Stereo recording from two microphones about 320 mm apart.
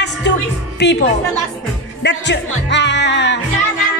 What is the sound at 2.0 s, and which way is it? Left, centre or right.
Speech, left.